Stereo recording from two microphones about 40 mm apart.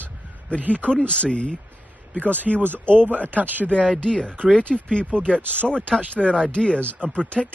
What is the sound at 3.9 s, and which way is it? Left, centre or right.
Speech, centre.